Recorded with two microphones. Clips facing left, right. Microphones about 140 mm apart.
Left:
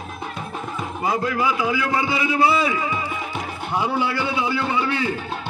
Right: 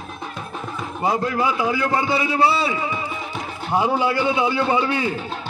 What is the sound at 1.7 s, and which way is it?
A man's voice, 35° right (ahead or behind).